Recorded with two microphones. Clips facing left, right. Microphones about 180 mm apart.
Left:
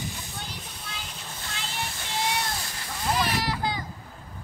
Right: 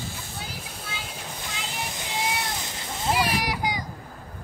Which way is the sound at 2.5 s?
20° right (ahead or behind).